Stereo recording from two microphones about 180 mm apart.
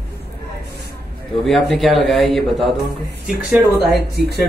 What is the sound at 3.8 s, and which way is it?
Speech, 60° right (ahead or behind).